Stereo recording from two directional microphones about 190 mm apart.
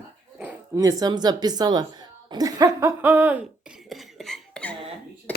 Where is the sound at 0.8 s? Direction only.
20° right (ahead or behind).